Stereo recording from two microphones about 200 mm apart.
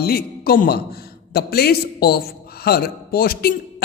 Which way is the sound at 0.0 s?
50° left (ahead or behind).